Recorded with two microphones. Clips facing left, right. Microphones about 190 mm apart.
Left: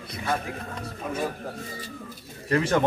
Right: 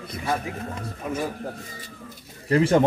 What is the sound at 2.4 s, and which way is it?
Speech, 25° right (ahead or behind).